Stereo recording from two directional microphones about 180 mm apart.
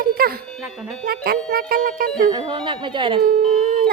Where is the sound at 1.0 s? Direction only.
55° right (ahead or behind).